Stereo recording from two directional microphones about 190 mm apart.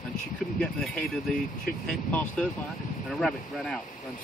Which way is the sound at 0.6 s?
5° left (ahead or behind).